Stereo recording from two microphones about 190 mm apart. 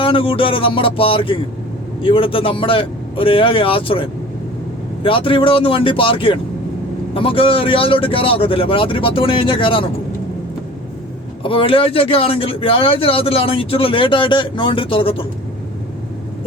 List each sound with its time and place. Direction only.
0.0 s speech: 30° left (ahead or behind)
11.4 s speech: 30° left (ahead or behind)